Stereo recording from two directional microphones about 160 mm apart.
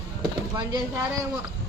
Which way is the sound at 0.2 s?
25° right (ahead or behind).